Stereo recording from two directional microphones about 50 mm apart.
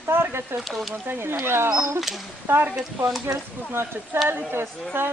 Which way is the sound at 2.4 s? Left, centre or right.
Right.